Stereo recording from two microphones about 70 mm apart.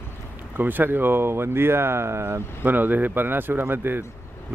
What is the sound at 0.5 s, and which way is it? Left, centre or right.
Speech, right.